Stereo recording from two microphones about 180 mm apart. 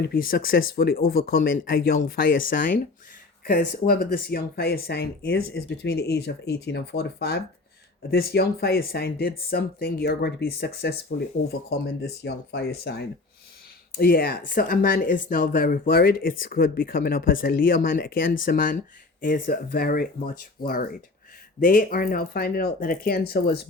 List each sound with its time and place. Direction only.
0.1 s speech: 55° left (ahead or behind)